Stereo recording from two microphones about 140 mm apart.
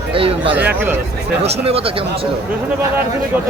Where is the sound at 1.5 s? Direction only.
45° right (ahead or behind).